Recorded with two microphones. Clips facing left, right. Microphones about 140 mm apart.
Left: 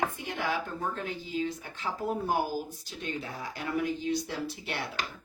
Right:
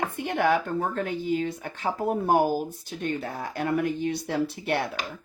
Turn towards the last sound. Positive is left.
turn(degrees=-55)  # may be behind; listen again after turning